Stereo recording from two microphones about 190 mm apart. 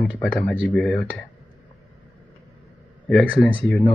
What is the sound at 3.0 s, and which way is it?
Speech, 5° left (ahead or behind).